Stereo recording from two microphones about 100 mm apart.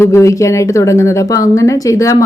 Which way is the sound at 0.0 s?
30° left (ahead or behind).